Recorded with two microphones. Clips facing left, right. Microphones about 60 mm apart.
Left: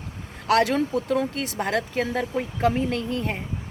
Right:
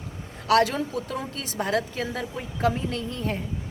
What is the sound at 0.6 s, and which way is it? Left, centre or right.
Speech, left.